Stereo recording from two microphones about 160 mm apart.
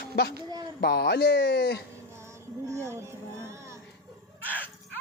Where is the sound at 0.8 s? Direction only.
85° left.